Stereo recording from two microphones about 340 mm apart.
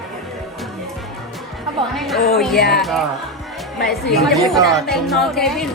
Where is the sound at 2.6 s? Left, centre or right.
Left.